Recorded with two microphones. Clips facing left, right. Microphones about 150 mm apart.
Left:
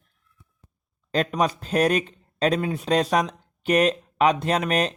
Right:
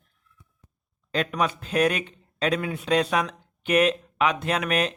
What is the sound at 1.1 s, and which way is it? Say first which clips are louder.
Speech: left 3 dB; 35° left (ahead or behind).